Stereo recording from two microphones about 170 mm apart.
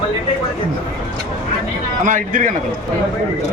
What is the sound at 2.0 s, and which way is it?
Speech, 50° right (ahead or behind).